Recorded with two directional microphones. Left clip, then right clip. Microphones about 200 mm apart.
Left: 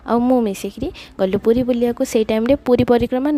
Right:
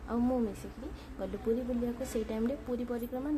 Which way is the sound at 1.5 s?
50° left (ahead or behind).